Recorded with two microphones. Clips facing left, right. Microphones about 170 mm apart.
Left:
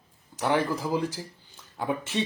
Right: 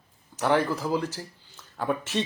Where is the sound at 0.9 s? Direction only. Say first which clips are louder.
Even; 15° left (ahead or behind).